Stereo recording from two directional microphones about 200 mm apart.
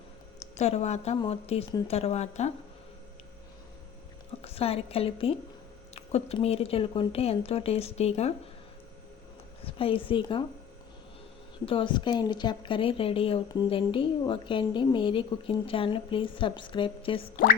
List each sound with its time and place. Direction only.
0.3 s speech: 35° left (ahead or behind)
4.4 s a woman's voice: 30° left (ahead or behind)
9.6 s a woman's voice: 25° left (ahead or behind)
11.6 s a woman's voice: 25° left (ahead or behind)